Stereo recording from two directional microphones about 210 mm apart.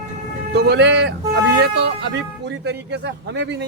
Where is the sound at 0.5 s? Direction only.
50° right (ahead or behind).